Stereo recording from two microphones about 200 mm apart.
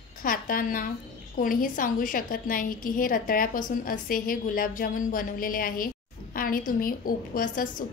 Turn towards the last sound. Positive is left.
turn(degrees=45)  # may be behind; listen again after turning